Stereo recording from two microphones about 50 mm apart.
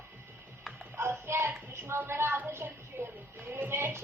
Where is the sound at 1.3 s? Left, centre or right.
Right.